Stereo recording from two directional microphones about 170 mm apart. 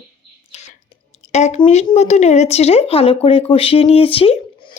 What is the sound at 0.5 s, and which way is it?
Whispering, 40° left (ahead or behind).